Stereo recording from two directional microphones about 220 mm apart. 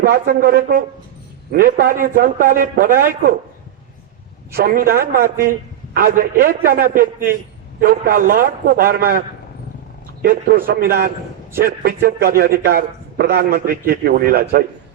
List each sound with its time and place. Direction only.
0.0 s a man's voice: 40° right (ahead or behind)
4.5 s a man's voice: 40° right (ahead or behind)
10.2 s a man's voice: 40° right (ahead or behind)